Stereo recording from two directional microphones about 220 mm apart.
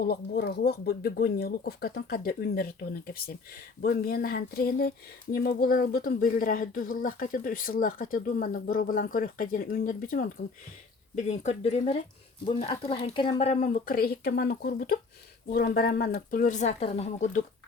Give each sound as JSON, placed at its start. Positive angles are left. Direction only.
{"t": 0.0, "sound": "speech", "side_deg": 45}